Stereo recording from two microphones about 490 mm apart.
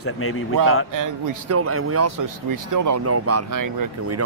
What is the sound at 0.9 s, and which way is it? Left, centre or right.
Speech, right.